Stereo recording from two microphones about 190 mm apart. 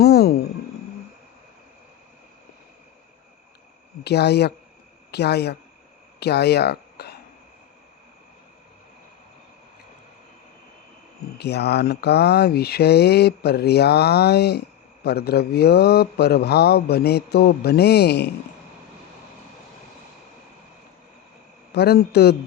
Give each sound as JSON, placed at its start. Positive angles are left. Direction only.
{"t": 0.0, "sound": "a sound", "side_deg": 55}
{"t": 4.0, "sound": "speech", "side_deg": 60}
{"t": 11.3, "sound": "speech", "side_deg": 60}
{"t": 21.8, "sound": "speech", "side_deg": 60}